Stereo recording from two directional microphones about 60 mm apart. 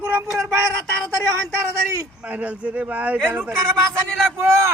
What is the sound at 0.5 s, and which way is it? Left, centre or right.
Speech, right.